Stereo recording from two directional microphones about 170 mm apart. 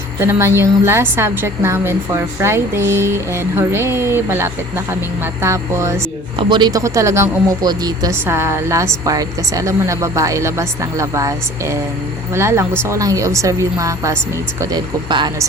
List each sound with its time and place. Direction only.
0.2 s speech: 15° right (ahead or behind)